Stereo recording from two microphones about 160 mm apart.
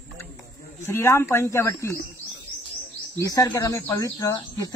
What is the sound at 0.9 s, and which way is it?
Speech, 15° left (ahead or behind).